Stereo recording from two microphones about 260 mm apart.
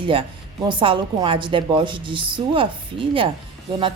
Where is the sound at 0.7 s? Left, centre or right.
Centre.